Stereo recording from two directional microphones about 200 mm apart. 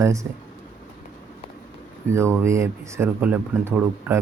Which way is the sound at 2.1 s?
15° right (ahead or behind).